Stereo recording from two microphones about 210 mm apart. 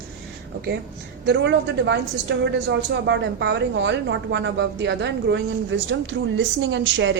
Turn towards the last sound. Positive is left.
turn(degrees=-60)  # may be behind; listen again after turning